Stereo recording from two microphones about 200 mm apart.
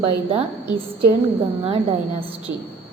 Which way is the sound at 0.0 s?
30° right (ahead or behind).